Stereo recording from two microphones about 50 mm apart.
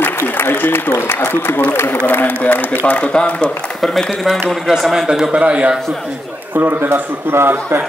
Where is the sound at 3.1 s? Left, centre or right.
Left.